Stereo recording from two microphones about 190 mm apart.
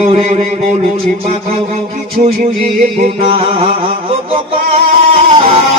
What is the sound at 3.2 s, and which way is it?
Music, 30° right (ahead or behind).